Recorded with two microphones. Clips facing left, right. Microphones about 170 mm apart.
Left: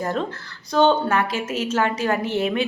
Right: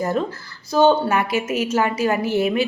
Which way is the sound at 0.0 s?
5° right (ahead or behind).